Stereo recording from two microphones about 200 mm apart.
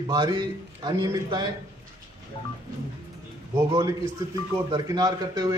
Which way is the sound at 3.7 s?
15° right (ahead or behind).